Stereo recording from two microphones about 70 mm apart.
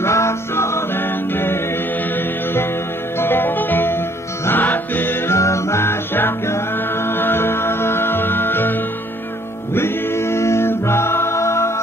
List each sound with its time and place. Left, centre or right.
0.0 s music: left
3.2 s music: left
5.3 s music: left
9.8 s music: left